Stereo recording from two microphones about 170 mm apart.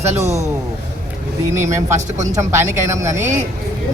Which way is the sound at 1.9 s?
45° right (ahead or behind).